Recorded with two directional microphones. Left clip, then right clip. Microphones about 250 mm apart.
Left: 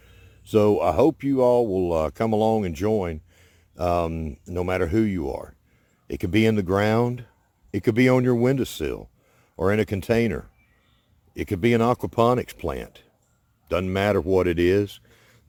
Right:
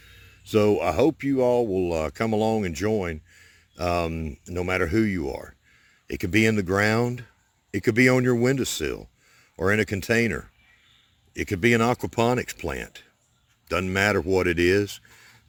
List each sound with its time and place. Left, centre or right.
0.0 s speech: centre